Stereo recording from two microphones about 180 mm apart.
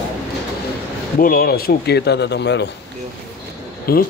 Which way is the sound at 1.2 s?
55° left (ahead or behind).